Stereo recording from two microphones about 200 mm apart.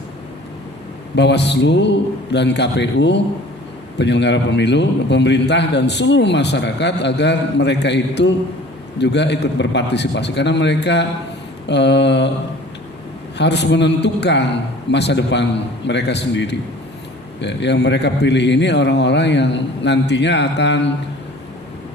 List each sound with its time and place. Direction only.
1.1 s a man's voice: 60° left (ahead or behind)
13.4 s a man's voice: 60° left (ahead or behind)